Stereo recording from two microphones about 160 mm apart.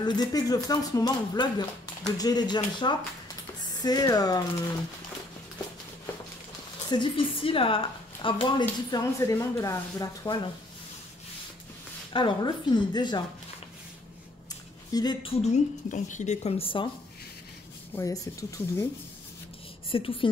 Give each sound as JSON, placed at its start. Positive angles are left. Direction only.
{"t": 0.0, "sound": "a woman's voice", "side_deg": 25}
{"t": 6.9, "sound": "a woman's voice", "side_deg": 30}
{"t": 12.1, "sound": "a woman's voice", "side_deg": 30}
{"t": 14.9, "sound": "a woman's voice", "side_deg": 25}
{"t": 15.3, "sound": "speech", "side_deg": 45}
{"t": 17.9, "sound": "a woman's voice", "side_deg": 20}
{"t": 19.9, "sound": "speech", "side_deg": 35}